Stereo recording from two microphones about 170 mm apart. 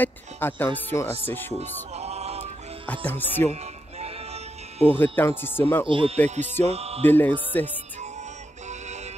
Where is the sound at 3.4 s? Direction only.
40° right (ahead or behind).